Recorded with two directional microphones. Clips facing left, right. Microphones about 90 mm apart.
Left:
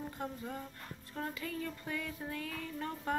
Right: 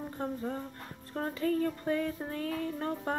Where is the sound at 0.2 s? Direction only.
40° right (ahead or behind).